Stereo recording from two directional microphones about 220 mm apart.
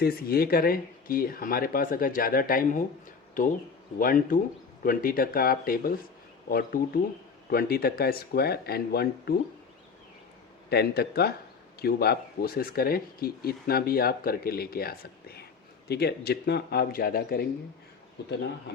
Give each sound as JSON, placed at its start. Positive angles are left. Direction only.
{"t": 0.0, "sound": "speech", "side_deg": 45}
{"t": 3.9, "sound": "speech", "side_deg": 40}
{"t": 10.7, "sound": "speech", "side_deg": 45}